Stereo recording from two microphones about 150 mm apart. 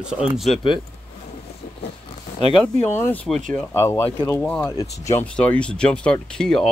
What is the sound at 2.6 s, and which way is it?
Speech, 15° left (ahead or behind).